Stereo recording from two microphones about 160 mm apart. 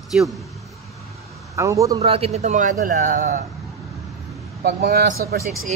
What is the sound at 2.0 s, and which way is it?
A man's voice, 40° right (ahead or behind).